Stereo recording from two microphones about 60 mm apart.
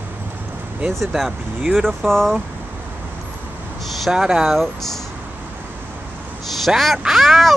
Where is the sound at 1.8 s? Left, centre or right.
Centre.